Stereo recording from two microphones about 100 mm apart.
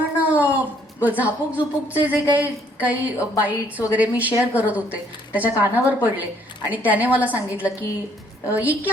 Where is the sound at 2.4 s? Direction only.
15° right (ahead or behind).